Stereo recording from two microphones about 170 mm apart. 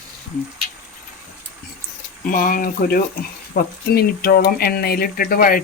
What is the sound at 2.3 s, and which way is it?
Speech, 55° left (ahead or behind).